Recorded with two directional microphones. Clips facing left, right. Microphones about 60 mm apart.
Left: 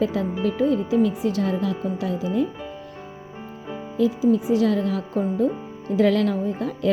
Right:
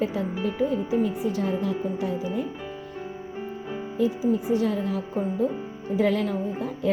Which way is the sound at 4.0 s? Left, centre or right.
Left.